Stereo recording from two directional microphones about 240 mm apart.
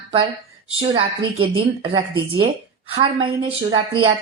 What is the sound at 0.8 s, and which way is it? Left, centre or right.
A woman's voice, right.